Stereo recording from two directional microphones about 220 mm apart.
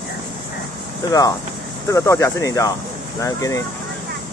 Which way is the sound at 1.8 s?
15° left (ahead or behind).